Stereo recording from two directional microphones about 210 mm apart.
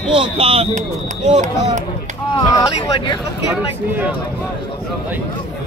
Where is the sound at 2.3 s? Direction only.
15° left (ahead or behind).